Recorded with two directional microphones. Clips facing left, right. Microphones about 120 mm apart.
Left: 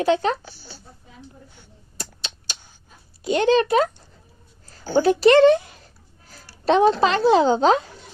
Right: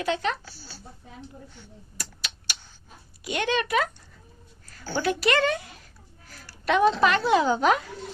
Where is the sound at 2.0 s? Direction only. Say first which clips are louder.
Left 4 dB; 25° left (ahead or behind).